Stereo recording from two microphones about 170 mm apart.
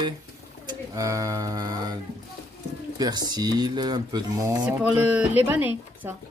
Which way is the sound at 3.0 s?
25° right (ahead or behind).